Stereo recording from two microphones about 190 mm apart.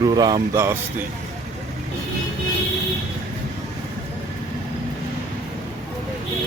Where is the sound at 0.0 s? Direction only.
20° right (ahead or behind).